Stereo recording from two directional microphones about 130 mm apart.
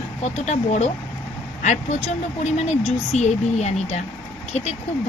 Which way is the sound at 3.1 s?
60° left (ahead or behind).